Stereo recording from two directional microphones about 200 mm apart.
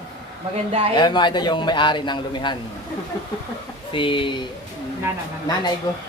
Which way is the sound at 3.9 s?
25° left (ahead or behind).